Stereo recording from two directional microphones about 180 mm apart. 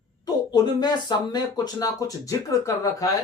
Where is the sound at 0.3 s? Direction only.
20° left (ahead or behind).